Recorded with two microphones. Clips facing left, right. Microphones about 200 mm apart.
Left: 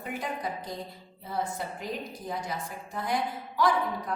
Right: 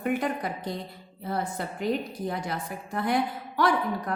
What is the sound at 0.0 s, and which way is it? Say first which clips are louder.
A woman's voice: right 6 dB; 65° right (ahead or behind).